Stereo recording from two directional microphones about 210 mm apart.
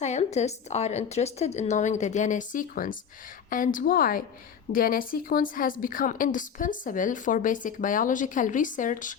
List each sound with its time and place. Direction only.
0.0 s a woman's voice: 35° left (ahead or behind)